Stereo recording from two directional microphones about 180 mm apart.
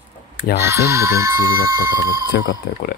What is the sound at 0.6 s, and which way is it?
Speech, 15° right (ahead or behind).